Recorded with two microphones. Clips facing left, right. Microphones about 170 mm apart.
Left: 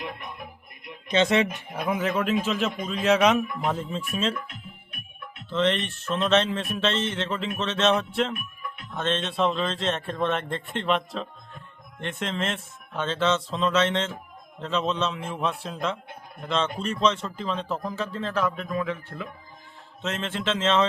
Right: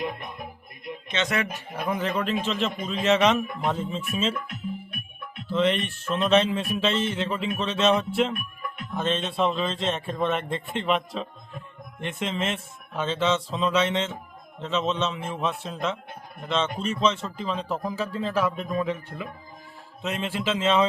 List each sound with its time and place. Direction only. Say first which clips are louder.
1.0 s speech: left 6 dB; 30° left (ahead or behind)
1.7 s a man's voice: even; 10° left (ahead or behind)
5.5 s a man's voice: right 1 dB; 5° right (ahead or behind)
18.7 s speech: right 2 dB; 25° right (ahead or behind)
20.0 s speech: right 1 dB; 10° right (ahead or behind)